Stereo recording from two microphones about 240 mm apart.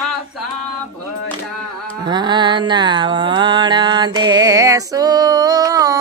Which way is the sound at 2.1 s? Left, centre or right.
Centre.